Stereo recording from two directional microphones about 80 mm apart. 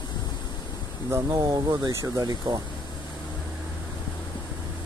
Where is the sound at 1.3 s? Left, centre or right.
Right.